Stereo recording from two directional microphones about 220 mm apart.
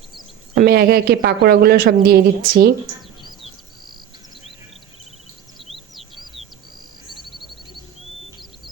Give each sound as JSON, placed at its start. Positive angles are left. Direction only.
{"t": 0.5, "sound": "speech", "side_deg": -45}
{"t": 5.5, "sound": "bird", "side_deg": 0}